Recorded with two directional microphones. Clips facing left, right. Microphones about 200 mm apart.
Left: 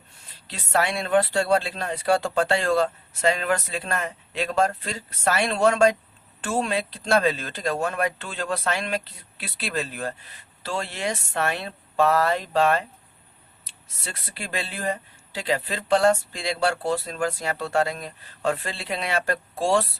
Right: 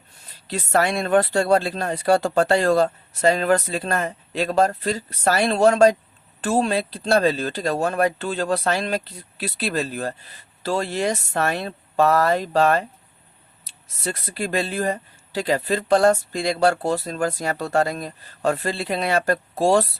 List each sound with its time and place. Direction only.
0.4 s speech: 45° right (ahead or behind)